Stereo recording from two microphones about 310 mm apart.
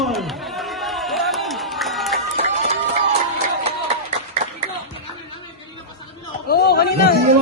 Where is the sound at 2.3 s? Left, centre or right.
Right.